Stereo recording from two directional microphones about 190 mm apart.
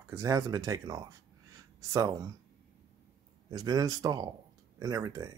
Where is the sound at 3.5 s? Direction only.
20° right (ahead or behind).